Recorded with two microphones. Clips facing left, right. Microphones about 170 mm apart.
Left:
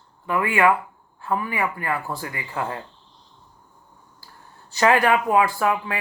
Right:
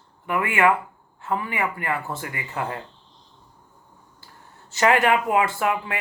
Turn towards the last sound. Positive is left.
turn(degrees=-25)  # may be behind; listen again after turning